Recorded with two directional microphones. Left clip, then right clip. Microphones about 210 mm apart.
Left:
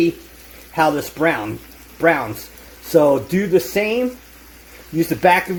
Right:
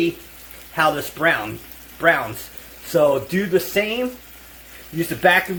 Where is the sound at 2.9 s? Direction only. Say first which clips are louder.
Left 3 dB; 30° left (ahead or behind).